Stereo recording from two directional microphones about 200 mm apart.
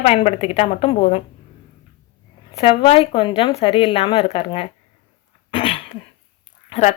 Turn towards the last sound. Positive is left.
turn(degrees=35)  # may be behind; listen again after turning